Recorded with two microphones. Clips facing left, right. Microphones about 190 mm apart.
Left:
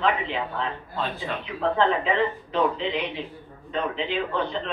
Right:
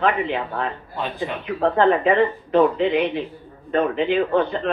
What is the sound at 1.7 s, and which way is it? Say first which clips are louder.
Speech: right 6 dB; 55° right (ahead or behind).